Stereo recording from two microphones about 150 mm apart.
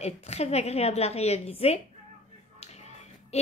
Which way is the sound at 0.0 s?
45° left (ahead or behind).